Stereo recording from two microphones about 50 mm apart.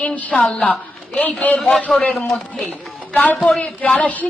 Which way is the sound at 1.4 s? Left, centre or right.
Left.